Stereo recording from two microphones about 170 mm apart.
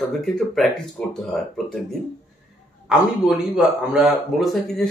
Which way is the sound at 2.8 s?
5° right (ahead or behind).